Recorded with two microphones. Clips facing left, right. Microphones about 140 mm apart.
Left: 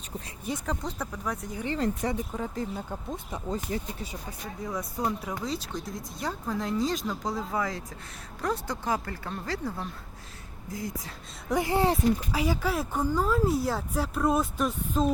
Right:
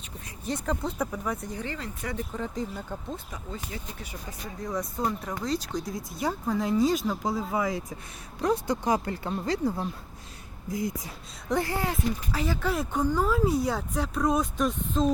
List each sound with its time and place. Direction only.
0.4 s speech: centre (ahead or behind)
3.3 s speech: 40° left (ahead or behind)
4.6 s speech: 5° left (ahead or behind); by 11.1 s 15° right (ahead or behind)
11.4 s speech: 15° left (ahead or behind)